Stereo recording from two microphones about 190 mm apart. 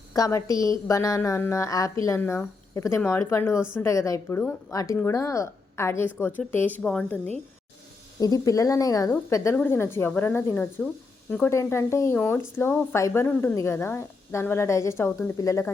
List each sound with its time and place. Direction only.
0.1 s a woman's voice: 15° left (ahead or behind)
8.2 s a woman's voice: 20° left (ahead or behind)